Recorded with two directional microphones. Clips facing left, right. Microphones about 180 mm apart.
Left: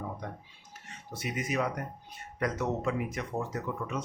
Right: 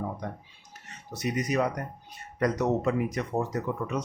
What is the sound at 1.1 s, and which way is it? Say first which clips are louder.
Speech: right 5 dB; 40° right (ahead or behind).